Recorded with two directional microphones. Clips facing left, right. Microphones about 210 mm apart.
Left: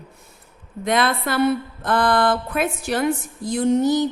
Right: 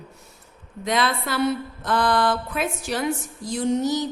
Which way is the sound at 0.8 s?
55° left (ahead or behind).